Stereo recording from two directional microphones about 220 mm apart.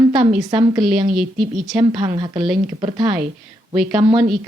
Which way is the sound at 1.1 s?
Centre (ahead or behind).